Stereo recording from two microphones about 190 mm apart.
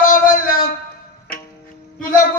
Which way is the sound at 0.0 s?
45° left (ahead or behind).